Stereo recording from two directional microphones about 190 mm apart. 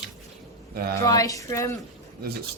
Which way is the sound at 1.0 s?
20° left (ahead or behind).